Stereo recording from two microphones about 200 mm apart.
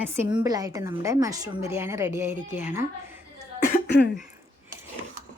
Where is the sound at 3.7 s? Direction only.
60° left (ahead or behind).